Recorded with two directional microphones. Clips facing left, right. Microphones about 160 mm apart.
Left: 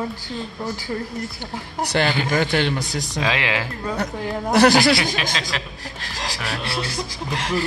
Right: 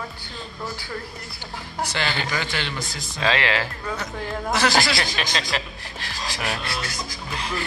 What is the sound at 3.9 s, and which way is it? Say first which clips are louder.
Speech: left 5 dB; 60° left (ahead or behind).